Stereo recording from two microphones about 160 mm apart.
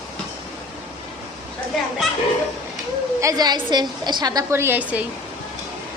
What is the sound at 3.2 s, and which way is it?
A woman's voice, 25° right (ahead or behind).